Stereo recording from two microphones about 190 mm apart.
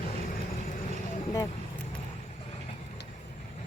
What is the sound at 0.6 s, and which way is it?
Vehicle, 45° left (ahead or behind).